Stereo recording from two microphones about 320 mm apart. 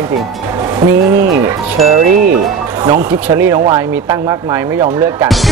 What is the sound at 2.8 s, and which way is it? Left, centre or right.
Speech, centre.